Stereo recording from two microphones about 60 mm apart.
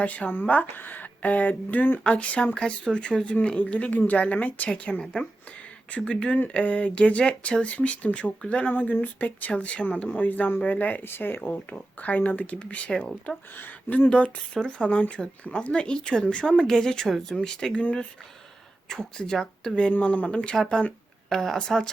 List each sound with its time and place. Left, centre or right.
0.0 s speech: left
9.5 s speech: centre
13.6 s speech: left
14.1 s speech: centre
18.9 s speech: centre